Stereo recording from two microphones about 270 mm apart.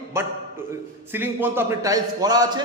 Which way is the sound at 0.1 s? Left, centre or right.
Centre.